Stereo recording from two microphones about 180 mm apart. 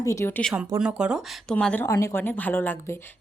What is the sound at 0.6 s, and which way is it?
Speech, 5° right (ahead or behind).